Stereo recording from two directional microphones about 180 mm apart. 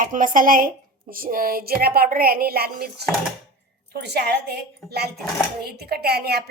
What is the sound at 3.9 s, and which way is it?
A woman's voice, 65° right (ahead or behind).